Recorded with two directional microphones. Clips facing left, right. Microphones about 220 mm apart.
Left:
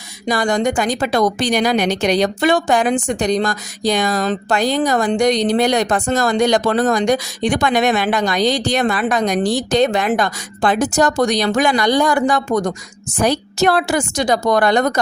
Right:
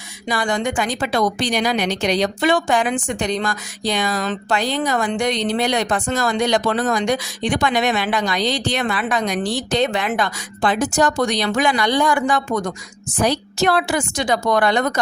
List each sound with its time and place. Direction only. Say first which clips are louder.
0.3 s a woman's voice: left 4 dB; 40° left (ahead or behind)